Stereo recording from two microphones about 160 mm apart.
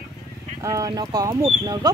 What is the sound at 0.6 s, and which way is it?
Speech, 20° right (ahead or behind).